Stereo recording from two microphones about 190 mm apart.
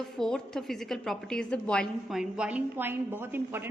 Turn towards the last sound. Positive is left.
turn(degrees=-10)  # may be behind; listen again after turning